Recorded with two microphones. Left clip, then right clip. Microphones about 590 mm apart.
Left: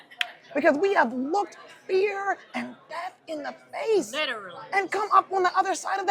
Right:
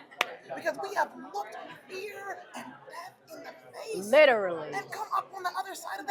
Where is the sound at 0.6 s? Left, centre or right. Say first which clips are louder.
Left 10 dB; left.